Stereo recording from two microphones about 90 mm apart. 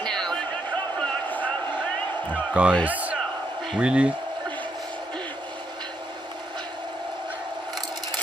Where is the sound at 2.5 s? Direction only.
15° right (ahead or behind).